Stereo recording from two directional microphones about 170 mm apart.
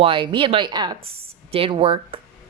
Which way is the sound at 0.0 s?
30° right (ahead or behind).